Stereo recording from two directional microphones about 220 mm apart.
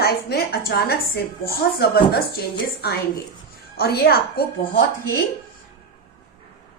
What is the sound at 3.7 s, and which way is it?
A woman's voice, 45° left (ahead or behind).